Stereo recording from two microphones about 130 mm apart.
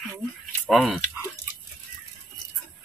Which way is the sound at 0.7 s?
Centre (ahead or behind).